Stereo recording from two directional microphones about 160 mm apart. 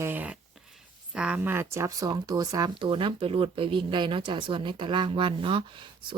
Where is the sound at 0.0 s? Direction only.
10° right (ahead or behind).